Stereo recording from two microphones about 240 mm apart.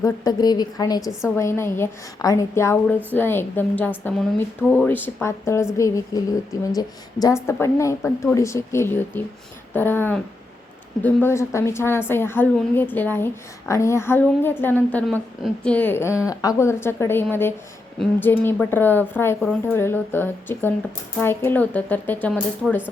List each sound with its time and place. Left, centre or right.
0.0 s a woman's voice: centre